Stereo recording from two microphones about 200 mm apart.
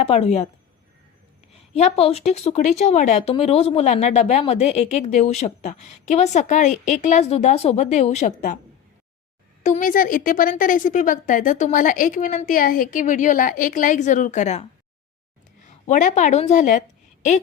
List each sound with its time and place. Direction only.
0.0 s speech: 30° left (ahead or behind)
1.7 s speech: 30° left (ahead or behind)
9.6 s a woman's voice: 40° left (ahead or behind)